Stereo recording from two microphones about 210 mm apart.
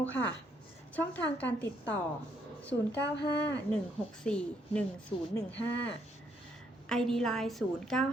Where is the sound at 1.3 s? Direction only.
5° left (ahead or behind).